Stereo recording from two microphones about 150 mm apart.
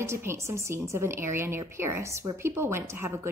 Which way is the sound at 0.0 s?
15° right (ahead or behind).